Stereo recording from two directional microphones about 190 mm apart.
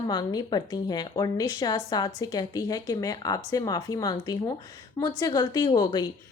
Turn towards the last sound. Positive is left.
turn(degrees=20)  # may be behind; listen again after turning